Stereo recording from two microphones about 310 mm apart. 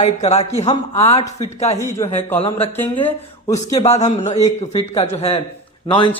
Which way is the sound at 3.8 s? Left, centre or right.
Left.